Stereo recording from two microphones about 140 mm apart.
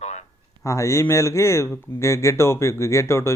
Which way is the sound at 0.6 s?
20° left (ahead or behind).